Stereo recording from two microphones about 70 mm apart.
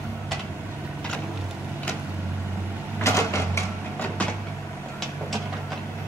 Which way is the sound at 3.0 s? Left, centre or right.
Left.